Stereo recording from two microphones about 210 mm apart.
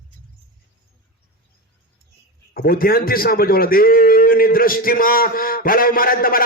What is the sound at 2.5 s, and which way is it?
A man's voice, 45° left (ahead or behind).